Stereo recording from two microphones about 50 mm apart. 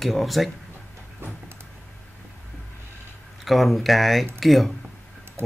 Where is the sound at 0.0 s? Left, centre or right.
Centre.